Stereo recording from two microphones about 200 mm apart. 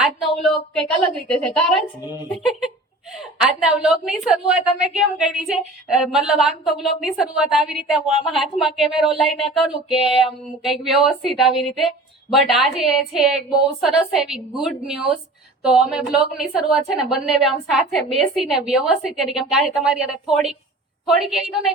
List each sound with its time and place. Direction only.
0.0 s a woman's voice: centre (ahead or behind)